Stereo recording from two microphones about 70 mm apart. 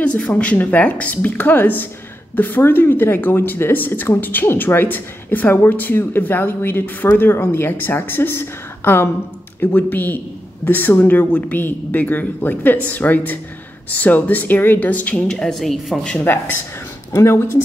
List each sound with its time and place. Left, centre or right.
0.0 s speech: left
15.2 s speech: centre
16.3 s speech: left
17.1 s speech: left